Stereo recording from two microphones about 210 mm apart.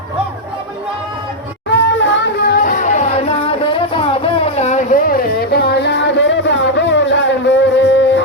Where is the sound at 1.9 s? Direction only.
60° left (ahead or behind).